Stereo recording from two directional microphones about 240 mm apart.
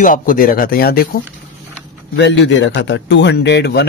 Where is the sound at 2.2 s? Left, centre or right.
Left.